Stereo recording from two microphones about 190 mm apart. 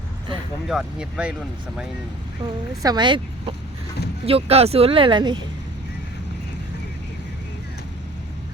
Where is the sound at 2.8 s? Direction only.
25° right (ahead or behind).